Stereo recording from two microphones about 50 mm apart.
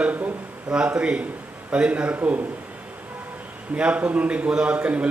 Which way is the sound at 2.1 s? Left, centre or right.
Right.